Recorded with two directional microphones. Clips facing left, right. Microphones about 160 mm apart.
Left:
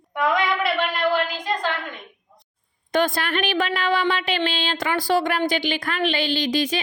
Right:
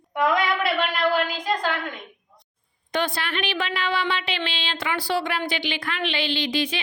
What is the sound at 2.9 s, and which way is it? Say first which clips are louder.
Speech: left 5 dB; 45° left (ahead or behind).